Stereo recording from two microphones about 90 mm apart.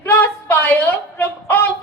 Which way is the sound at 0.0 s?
20° left (ahead or behind).